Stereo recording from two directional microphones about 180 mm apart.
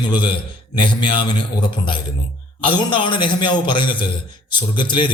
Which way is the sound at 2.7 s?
25° left (ahead or behind).